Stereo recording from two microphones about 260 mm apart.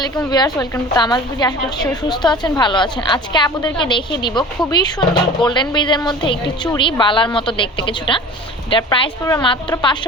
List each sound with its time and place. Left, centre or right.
0.3 s a woman's voice: centre